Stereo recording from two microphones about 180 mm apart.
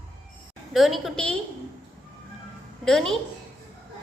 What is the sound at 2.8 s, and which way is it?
Speech, 5° left (ahead or behind).